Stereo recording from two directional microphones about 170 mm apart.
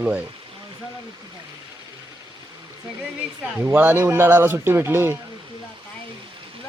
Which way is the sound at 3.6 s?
15° right (ahead or behind).